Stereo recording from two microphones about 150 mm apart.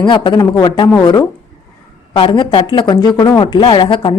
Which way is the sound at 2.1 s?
35° left (ahead or behind).